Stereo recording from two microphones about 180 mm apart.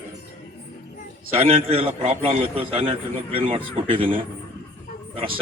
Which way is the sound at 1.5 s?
30° right (ahead or behind).